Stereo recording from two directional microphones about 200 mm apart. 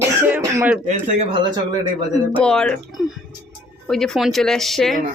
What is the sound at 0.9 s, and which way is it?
Speech, 40° right (ahead or behind).